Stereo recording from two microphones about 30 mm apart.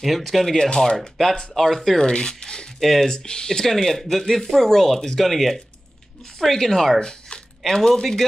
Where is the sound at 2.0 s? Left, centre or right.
Left.